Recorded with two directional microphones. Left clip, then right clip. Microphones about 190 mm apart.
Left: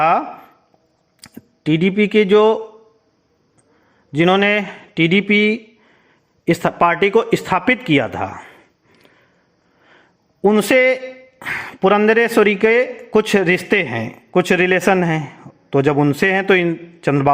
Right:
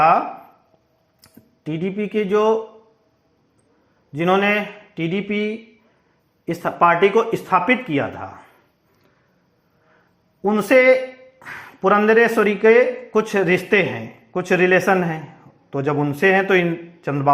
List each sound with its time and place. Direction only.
1.2 s speech: 40° left (ahead or behind)
4.1 s a man's voice: 40° left (ahead or behind)
10.4 s a man's voice: 35° left (ahead or behind)